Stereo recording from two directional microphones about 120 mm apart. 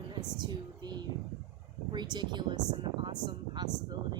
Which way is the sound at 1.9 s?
40° right (ahead or behind).